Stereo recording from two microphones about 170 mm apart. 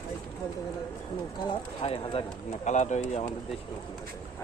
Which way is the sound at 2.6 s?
45° left (ahead or behind).